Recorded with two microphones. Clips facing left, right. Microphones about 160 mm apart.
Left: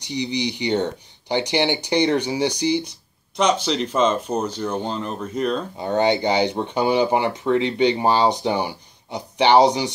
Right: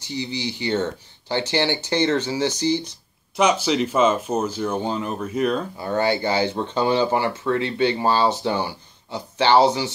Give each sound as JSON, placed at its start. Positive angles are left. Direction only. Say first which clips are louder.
{"t": 0.0, "sound": "speech", "louder": "left 3 dB", "side_deg": 15}
{"t": 3.3, "sound": "speech", "louder": "right 1 dB", "side_deg": -5}
{"t": 5.8, "sound": "speech", "louder": "left 5 dB", "side_deg": 20}